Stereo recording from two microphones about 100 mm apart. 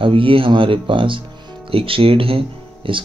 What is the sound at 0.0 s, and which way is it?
Speech, 60° right (ahead or behind).